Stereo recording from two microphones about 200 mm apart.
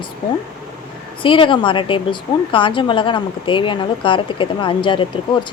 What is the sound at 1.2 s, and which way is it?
A woman's voice, 25° left (ahead or behind).